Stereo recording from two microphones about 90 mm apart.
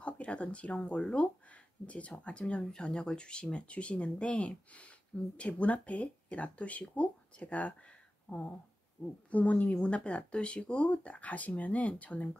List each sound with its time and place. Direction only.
0.0 s speech: 15° left (ahead or behind)